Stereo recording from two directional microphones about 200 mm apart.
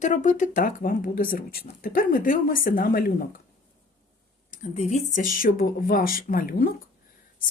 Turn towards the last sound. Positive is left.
turn(degrees=45)  # may be behind; listen again after turning